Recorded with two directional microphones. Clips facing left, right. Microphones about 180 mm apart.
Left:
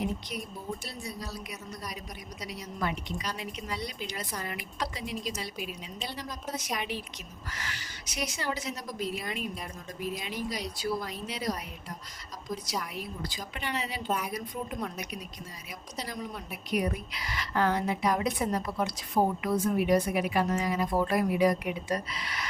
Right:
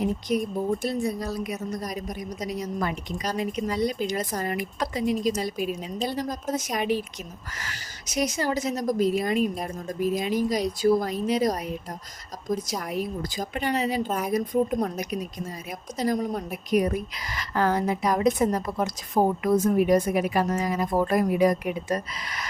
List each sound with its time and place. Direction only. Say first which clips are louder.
0.0 s a woman's voice: right 9 dB; 45° right (ahead or behind)